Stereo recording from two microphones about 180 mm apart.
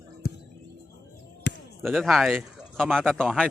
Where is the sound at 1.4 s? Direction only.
80° left.